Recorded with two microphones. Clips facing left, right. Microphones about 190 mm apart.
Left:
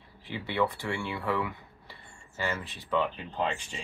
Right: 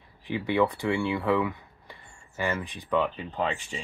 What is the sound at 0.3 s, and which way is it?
Speech, 15° right (ahead or behind).